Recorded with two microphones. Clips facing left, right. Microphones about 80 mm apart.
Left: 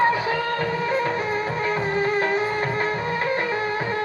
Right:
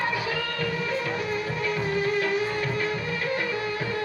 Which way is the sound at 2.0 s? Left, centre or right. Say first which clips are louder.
Left 3 dB; left.